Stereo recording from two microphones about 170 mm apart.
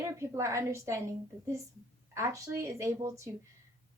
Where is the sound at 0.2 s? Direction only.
15° right (ahead or behind).